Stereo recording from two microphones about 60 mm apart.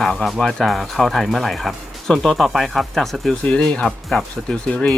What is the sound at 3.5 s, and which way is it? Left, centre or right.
Speech, centre.